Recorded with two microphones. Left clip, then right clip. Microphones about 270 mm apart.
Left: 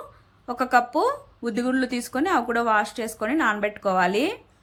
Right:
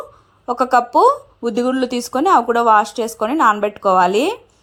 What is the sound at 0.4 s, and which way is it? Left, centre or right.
A woman's voice, right.